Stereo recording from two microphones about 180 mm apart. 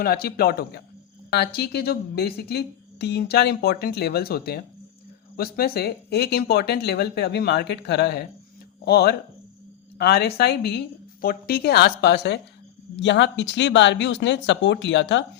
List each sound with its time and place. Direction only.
0.0 s a woman's voice: 55° left (ahead or behind)
13.0 s speech: 80° left